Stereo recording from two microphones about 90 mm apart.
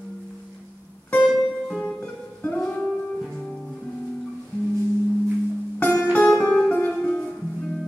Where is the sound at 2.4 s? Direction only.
15° left (ahead or behind).